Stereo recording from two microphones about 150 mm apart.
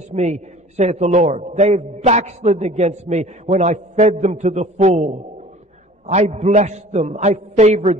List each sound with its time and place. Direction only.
0.1 s a man's voice: 50° right (ahead or behind)